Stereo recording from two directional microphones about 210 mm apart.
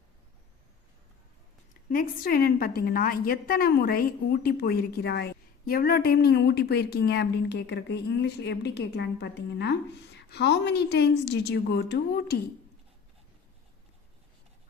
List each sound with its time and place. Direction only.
1.9 s a woman's voice: 40° left (ahead or behind)